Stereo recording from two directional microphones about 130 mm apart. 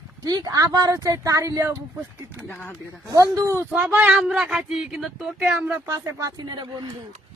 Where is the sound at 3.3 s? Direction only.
25° right (ahead or behind).